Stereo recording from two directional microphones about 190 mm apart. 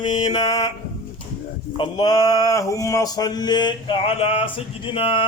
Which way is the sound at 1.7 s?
25° left (ahead or behind).